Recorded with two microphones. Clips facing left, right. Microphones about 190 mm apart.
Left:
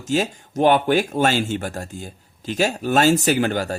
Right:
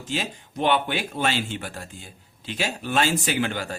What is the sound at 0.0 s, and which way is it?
A man's voice, 45° left (ahead or behind).